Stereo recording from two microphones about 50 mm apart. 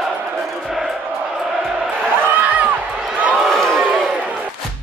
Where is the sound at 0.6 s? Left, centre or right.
Centre.